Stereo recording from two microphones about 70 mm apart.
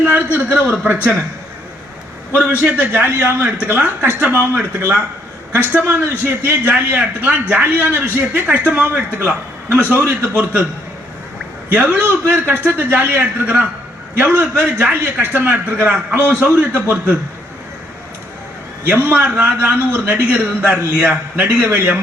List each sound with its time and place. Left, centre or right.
0.0 s a sound: right
0.3 s a man's voice: right
2.6 s a man's voice: right
11.7 s a man's voice: right
18.9 s a man's voice: right